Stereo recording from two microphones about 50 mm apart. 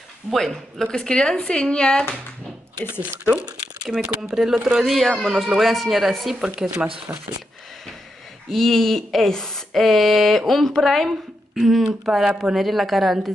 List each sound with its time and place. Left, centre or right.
0.3 s speech: centre
0.8 s speech: centre
3.4 s speech: centre
6.4 s speech: centre
7.1 s speech: right
8.5 s a woman's voice: centre